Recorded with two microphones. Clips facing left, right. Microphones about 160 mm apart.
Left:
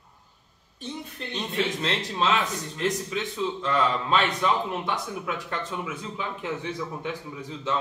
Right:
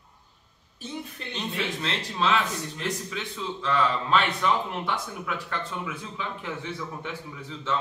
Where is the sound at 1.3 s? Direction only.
20° left (ahead or behind).